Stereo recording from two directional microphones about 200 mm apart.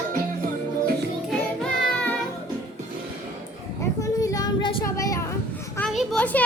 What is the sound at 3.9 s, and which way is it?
Child singing, 15° left (ahead or behind).